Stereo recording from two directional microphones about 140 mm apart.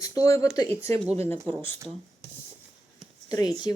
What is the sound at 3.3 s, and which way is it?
Speech, 30° left (ahead or behind).